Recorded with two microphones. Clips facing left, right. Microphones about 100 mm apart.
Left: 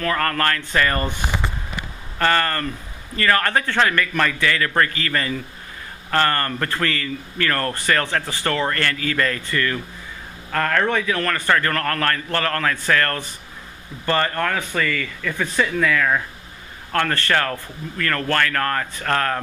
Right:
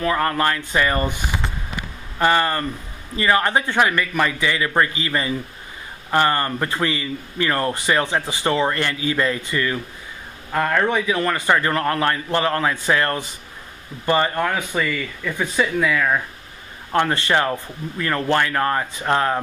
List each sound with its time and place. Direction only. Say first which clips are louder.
0.0 s speech: right 2 dB; 15° right (ahead or behind)
2.1 s speech: right 2 dB; 15° right (ahead or behind)